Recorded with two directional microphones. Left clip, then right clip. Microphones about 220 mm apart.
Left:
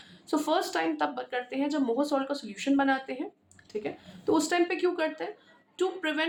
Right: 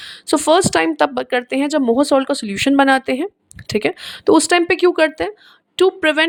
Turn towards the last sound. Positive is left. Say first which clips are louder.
# right 15 dB
turn(degrees=-45)  # may be behind; listen again after turning